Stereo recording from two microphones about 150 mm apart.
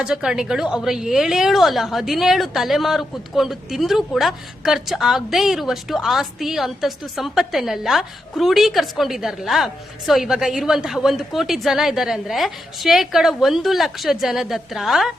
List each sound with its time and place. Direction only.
0.0 s a woman's voice: 5° right (ahead or behind)